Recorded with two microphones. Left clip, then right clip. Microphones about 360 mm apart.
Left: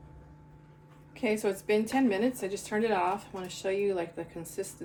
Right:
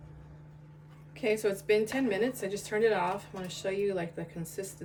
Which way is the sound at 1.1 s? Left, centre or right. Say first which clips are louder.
Even; centre.